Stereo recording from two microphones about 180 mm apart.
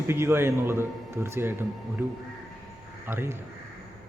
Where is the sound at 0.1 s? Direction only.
15° right (ahead or behind).